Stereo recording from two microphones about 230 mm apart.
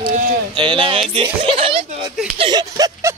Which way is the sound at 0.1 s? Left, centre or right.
Right.